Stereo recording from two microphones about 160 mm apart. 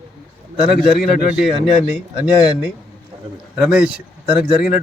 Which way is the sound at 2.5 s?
5° right (ahead or behind).